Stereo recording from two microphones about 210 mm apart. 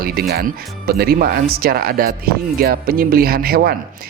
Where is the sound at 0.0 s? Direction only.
45° right (ahead or behind).